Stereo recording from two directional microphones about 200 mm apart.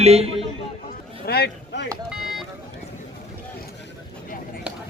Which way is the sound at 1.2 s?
50° left (ahead or behind).